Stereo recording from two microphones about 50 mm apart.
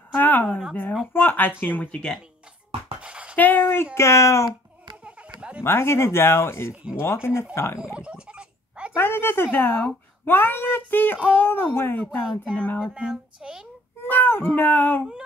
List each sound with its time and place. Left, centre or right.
0.2 s a sound: left
1.1 s speech: left
3.0 s a sound: right
3.3 s speech: left
3.6 s speech: left
5.0 s a sound: right
5.6 s speech: left
6.7 s speech: right
7.0 s speech: left
7.8 s a sound: centre
8.9 s speech: left
12.9 s speech: centre
14.0 s speech: left